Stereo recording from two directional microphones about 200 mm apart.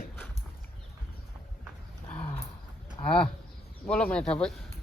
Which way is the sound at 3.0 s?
25° left (ahead or behind).